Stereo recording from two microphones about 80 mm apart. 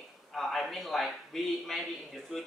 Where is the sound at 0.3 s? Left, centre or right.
Centre.